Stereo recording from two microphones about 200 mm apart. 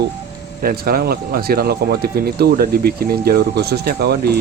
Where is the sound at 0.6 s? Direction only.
50° right (ahead or behind).